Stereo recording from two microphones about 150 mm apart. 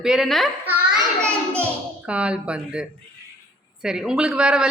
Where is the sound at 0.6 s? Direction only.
10° right (ahead or behind).